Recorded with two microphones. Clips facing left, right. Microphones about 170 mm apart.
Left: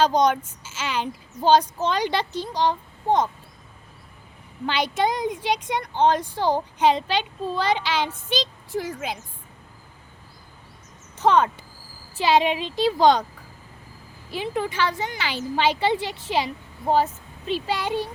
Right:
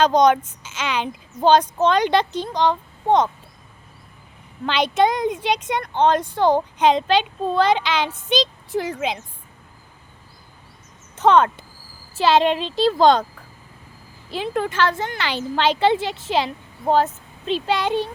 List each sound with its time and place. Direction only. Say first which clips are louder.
0.0 s a child's voice: right 4 dB; 65° right (ahead or behind)
4.6 s a woman's voice: right 5 dB; 65° right (ahead or behind)
8.7 s speech: right 4 dB; 80° right
11.2 s a child's voice: right 4 dB; 60° right (ahead or behind)
12.1 s speech: right 3 dB; 15° left (ahead or behind)
14.3 s speech: right 3 dB; 15° left (ahead or behind)